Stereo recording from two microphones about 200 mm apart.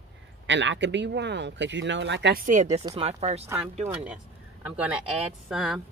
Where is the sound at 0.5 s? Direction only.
65° right (ahead or behind).